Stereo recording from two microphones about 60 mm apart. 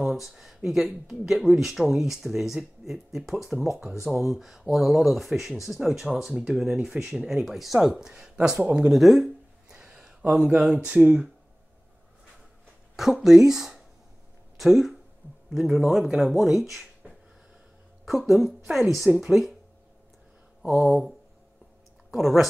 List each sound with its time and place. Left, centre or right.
0.0 s a sound: centre
0.7 s speech: centre
8.9 s speech: centre
9.7 s a sound: centre
10.3 s speech: centre
12.9 s speech: centre
18.0 s speech: centre
22.1 s speech: centre